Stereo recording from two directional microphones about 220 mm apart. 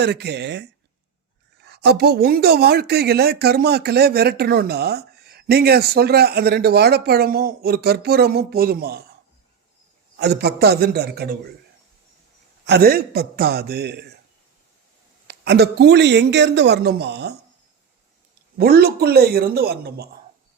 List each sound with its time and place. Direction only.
0.0 s speech: 50° right (ahead or behind)
10.2 s speech: 50° right (ahead or behind)
12.6 s speech: 45° right (ahead or behind)
15.3 s speech: 50° right (ahead or behind)
18.5 s speech: 45° right (ahead or behind)